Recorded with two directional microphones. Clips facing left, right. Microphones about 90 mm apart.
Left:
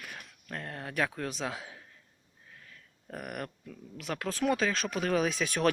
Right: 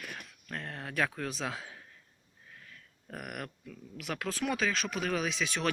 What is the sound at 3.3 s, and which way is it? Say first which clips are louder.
Speech: left 2 dB; 35° left (ahead or behind).